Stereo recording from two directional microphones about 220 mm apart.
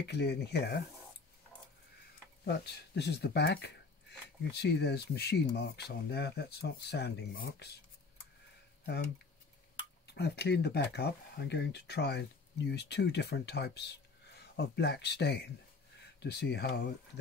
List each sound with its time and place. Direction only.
0.1 s speech: 50° left (ahead or behind)
2.4 s speech: 50° left (ahead or behind)
10.0 s speech: 50° left (ahead or behind)